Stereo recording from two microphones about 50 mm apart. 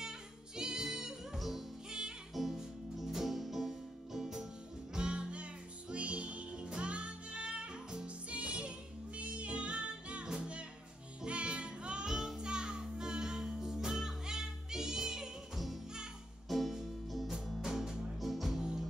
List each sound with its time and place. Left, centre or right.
0.6 s music: centre
1.9 s music: centre
2.3 s music: centre
12.1 s music: centre
16.4 s music: centre